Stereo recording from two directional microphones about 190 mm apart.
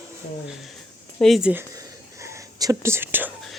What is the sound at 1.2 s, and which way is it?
Speech, centre (ahead or behind).